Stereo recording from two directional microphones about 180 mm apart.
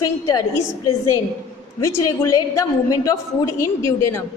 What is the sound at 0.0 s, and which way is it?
A woman's voice, 20° left (ahead or behind).